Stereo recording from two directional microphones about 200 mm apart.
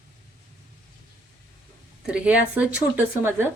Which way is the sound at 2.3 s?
5° right (ahead or behind).